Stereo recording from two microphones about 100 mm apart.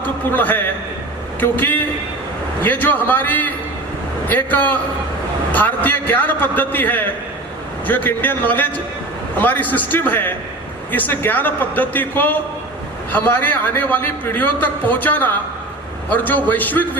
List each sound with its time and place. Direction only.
0.0 s a man's voice: 20° left (ahead or behind)